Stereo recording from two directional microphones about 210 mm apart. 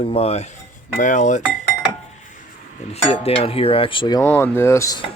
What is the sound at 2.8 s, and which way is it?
Cutlery, 30° left (ahead or behind).